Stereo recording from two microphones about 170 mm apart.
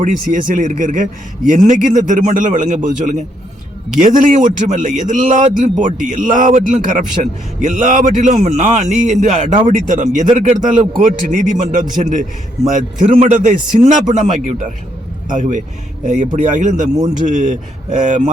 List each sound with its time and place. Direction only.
0.0 s a man's voice: 50° right (ahead or behind)